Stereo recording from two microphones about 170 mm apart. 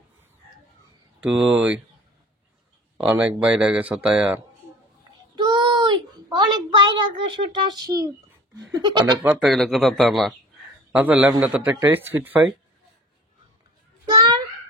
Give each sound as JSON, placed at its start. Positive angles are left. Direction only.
{"t": 1.2, "sound": "a man's voice", "side_deg": -5}
{"t": 3.0, "sound": "speech", "side_deg": -5}
{"t": 5.3, "sound": "child singing", "side_deg": -25}
{"t": 9.2, "sound": "a man's voice", "side_deg": -5}
{"t": 14.1, "sound": "a sound", "side_deg": -20}